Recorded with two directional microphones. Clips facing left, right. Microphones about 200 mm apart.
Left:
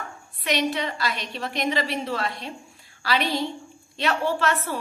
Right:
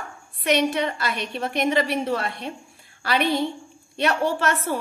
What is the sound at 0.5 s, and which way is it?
A woman's voice, 50° right (ahead or behind).